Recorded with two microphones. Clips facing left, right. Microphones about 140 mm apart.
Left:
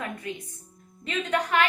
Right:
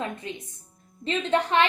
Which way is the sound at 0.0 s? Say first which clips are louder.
Right 1 dB; 25° right (ahead or behind).